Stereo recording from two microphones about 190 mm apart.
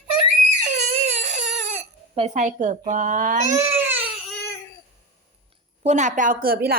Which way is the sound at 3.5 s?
10° right (ahead or behind).